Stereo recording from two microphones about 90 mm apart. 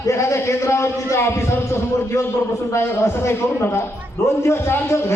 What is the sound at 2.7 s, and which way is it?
A man's voice, 30° left (ahead or behind).